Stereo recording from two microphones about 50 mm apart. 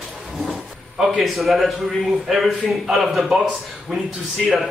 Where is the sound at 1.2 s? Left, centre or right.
Centre.